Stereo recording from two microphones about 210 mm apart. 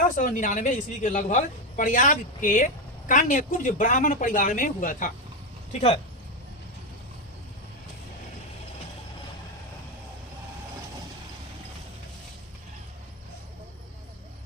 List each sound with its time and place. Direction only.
0.2 s a woman's voice: 40° left (ahead or behind)